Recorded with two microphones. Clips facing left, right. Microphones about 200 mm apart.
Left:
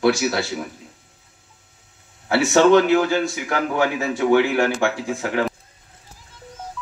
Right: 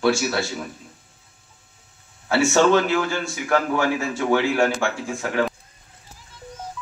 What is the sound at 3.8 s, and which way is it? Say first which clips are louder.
Speech: left 2 dB; 60° left (ahead or behind).